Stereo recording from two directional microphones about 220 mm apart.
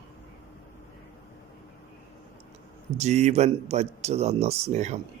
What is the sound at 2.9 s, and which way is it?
Speech, 30° right (ahead or behind).